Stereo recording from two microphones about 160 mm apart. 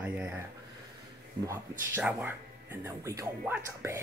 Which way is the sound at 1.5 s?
10° right (ahead or behind).